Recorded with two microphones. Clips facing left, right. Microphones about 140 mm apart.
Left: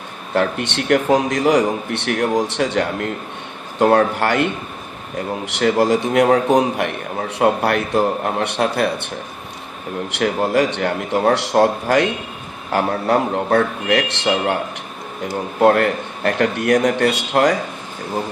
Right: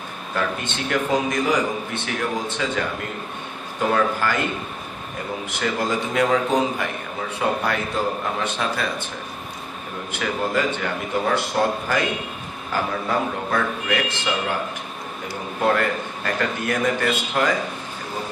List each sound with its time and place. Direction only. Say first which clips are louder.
0.3 s a man's voice: left 6 dB; 70° left (ahead or behind)
5.5 s a man's voice: left 9 dB; 75° left (ahead or behind)
10.1 s a man's voice: left 6 dB; 70° left (ahead or behind)
15.6 s a man's voice: left 7 dB; 65° left (ahead or behind)